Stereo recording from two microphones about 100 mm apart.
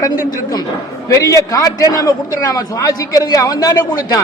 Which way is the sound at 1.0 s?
35° left (ahead or behind).